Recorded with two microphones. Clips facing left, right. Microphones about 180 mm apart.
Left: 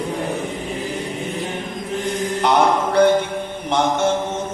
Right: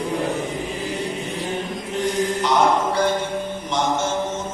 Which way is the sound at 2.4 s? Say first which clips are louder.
Left 3 dB; 60° left (ahead or behind).